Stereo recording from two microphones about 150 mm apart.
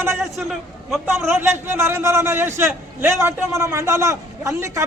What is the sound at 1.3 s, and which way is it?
Speech, 15° right (ahead or behind).